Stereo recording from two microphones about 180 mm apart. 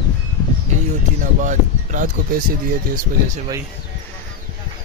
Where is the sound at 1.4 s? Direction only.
45° right (ahead or behind).